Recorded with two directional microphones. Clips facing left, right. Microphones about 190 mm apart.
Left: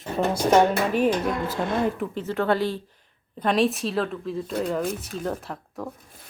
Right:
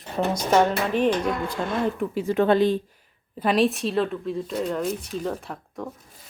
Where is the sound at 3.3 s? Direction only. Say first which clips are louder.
Right 1 dB; 5° right (ahead or behind).